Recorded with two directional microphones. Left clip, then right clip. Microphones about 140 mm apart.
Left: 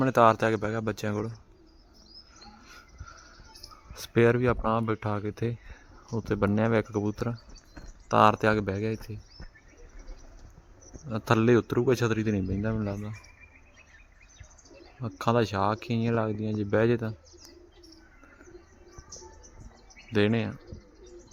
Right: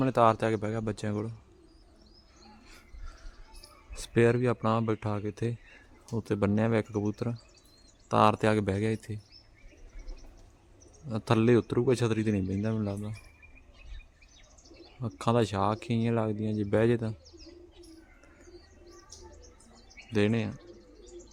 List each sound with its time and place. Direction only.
0.0 s a man's voice: 15° right (ahead or behind)
2.6 s a sound: 15° right (ahead or behind)
3.9 s a man's voice: 15° right (ahead or behind)
8.6 s speech: 30° right (ahead or behind)
11.1 s a man's voice: 15° right (ahead or behind)
15.0 s speech: 20° right (ahead or behind)
20.1 s a man's voice: 10° right (ahead or behind)